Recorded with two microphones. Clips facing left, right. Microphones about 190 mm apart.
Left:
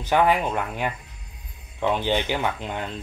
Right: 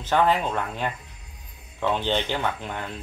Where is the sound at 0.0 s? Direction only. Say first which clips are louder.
Left 1 dB; 15° left (ahead or behind).